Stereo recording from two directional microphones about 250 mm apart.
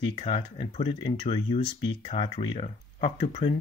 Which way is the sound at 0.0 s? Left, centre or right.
Left.